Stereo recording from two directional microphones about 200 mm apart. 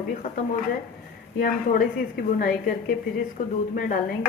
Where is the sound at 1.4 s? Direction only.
45° left (ahead or behind).